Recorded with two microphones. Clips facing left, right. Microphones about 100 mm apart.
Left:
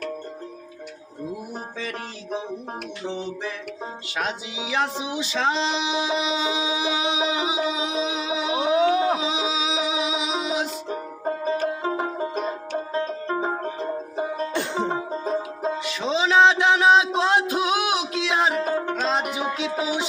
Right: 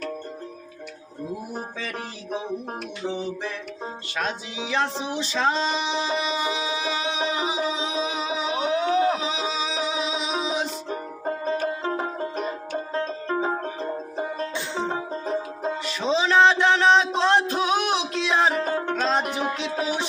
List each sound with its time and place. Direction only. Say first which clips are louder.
3.1 s music: right 1 dB; 5° right (ahead or behind)
4.2 s music: even; 15° left (ahead or behind)
11.8 s music: left 2 dB; 10° left (ahead or behind)
14.5 s music: left 4 dB; 55° left (ahead or behind)
14.8 s music: left 2 dB; 15° left (ahead or behind)
15.8 s music: right 2 dB; centre (ahead or behind)